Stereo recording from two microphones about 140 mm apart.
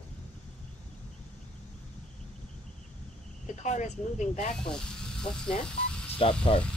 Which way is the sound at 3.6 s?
55° left (ahead or behind).